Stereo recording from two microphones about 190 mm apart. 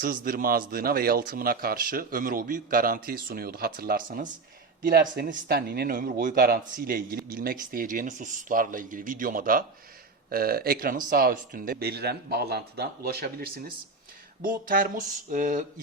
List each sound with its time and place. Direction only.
0.0 s speech: 50° right (ahead or behind)